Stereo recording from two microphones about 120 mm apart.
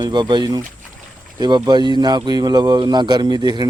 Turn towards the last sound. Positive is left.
turn(degrees=-35)  # may be behind; listen again after turning